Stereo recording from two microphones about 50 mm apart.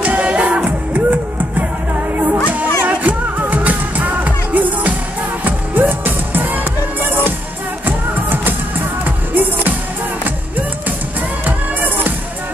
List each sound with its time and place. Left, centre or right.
0.0 s music: right
7.8 s music: right
11.4 s music: right